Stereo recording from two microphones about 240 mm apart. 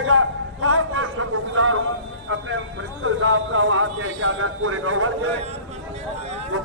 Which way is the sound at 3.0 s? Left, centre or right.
Right.